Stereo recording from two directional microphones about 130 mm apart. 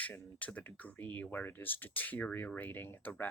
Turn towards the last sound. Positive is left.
turn(degrees=15)  # may be behind; listen again after turning